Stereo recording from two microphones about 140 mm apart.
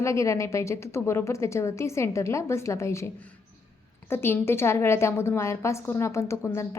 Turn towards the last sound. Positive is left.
turn(degrees=20)  # may be behind; listen again after turning